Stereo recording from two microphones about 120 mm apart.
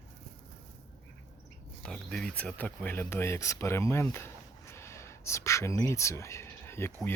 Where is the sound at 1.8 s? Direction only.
5° left (ahead or behind).